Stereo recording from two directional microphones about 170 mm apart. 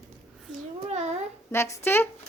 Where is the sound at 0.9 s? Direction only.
40° right (ahead or behind).